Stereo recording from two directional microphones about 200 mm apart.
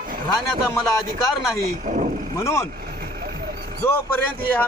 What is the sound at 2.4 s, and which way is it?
Speech, 15° left (ahead or behind).